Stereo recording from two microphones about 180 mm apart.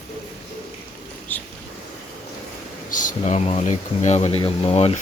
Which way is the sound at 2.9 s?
45° left (ahead or behind).